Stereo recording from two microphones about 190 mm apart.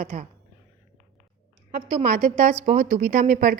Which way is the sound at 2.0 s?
40° right (ahead or behind).